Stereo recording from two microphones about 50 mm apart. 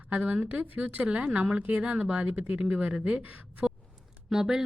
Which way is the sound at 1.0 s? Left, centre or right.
Right.